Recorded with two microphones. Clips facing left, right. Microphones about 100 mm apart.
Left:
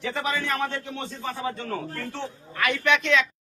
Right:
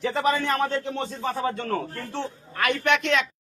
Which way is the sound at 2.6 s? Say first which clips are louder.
Right 1 dB; 55° right (ahead or behind).